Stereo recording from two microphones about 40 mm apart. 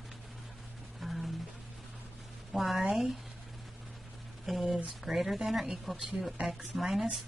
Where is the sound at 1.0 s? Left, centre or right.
Centre.